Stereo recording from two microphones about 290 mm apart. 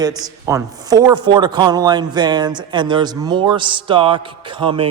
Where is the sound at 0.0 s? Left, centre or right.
Centre.